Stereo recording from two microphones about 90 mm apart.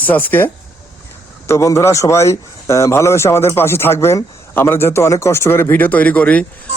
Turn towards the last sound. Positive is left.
turn(degrees=15)  # may be behind; listen again after turning